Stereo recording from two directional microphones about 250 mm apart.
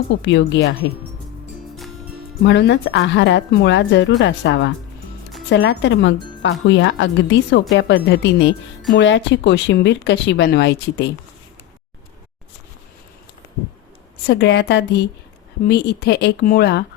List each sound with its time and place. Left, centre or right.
0.2 s a woman's voice: left
2.4 s a woman's voice: left
14.3 s speech: left